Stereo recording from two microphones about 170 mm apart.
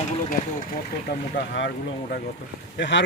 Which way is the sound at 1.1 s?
75° left (ahead or behind).